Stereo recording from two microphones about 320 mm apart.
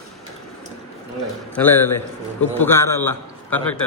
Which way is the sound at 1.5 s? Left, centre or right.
Centre.